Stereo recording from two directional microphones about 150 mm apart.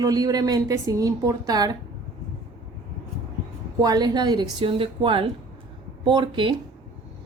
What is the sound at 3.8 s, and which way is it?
Speech, 25° right (ahead or behind).